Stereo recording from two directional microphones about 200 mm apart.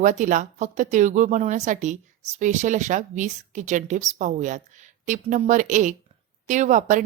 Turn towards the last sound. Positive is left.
turn(degrees=-40)  # may be behind; listen again after turning